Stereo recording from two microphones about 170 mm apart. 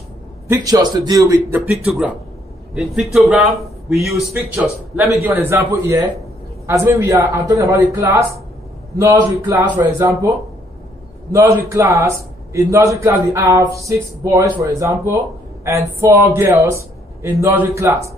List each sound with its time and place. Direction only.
0.5 s speech: 20° right (ahead or behind)
1.9 s a man's voice: 5° right (ahead or behind)
11.3 s a man's voice: 15° right (ahead or behind)